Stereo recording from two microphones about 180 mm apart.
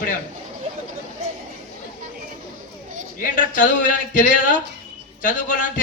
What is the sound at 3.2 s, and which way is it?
Speech, 50° left (ahead or behind).